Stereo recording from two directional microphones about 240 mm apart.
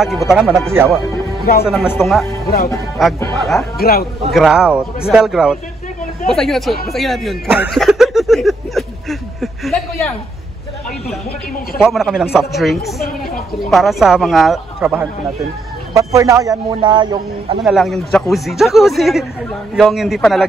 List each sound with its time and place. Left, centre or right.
0.0 s speech: centre
1.4 s speech: left
1.7 s speech: centre
2.4 s speech: left
3.0 s speech: centre
3.7 s a man's voice: left
4.3 s speech: centre
11.8 s a man's voice: centre
17.6 s speech: centre